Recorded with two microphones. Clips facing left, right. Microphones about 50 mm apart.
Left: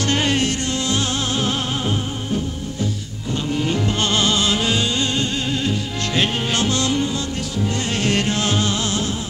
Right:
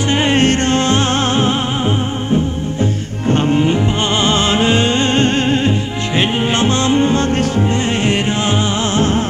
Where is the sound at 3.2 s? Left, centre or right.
Right.